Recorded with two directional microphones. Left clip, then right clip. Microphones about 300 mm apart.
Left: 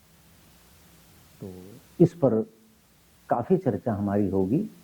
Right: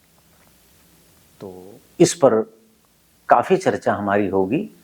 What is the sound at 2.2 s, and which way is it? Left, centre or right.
Speech, centre.